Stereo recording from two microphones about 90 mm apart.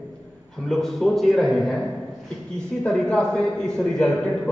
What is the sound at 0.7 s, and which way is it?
A man's voice, 5° left (ahead or behind).